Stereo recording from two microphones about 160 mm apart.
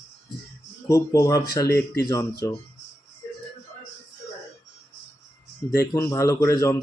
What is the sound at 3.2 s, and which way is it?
Music, 25° left (ahead or behind).